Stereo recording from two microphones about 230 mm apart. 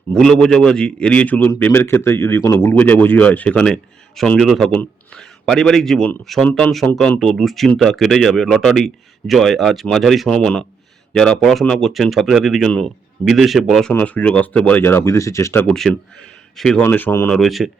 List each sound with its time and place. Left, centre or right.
0.1 s a man's voice: centre